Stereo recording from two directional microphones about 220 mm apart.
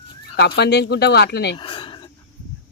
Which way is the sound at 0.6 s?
50° left (ahead or behind).